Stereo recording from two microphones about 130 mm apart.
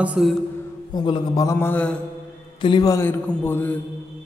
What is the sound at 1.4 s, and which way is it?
Speech, 20° left (ahead or behind).